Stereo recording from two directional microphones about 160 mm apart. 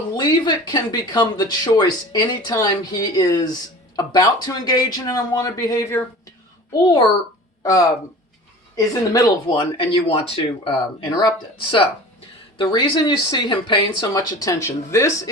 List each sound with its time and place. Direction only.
0.2 s speech: 25° left (ahead or behind)
7.6 s speech: 20° left (ahead or behind)
9.7 s speech: 35° left (ahead or behind); by 15.3 s 20° left (ahead or behind)